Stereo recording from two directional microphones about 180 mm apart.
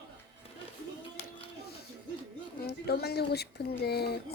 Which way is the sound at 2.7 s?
65° left (ahead or behind).